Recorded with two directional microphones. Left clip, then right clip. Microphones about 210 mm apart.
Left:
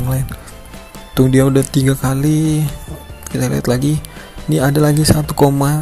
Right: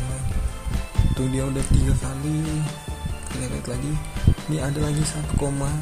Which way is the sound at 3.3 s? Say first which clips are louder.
Left 15 dB; 40° left (ahead or behind).